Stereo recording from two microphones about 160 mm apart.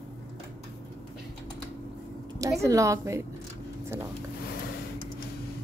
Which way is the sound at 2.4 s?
20° right (ahead or behind).